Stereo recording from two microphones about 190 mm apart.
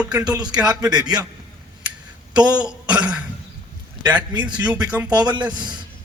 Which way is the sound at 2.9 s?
5° right (ahead or behind).